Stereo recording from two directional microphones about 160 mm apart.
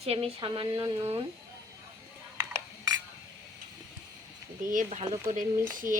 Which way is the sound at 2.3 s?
20° right (ahead or behind).